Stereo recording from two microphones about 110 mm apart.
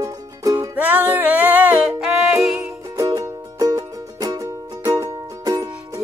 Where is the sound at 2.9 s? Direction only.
35° right (ahead or behind).